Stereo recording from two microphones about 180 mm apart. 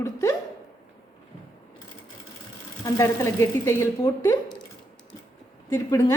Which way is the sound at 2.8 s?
15° left (ahead or behind).